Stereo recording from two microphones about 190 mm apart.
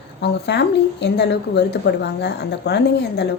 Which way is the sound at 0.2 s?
65° left (ahead or behind).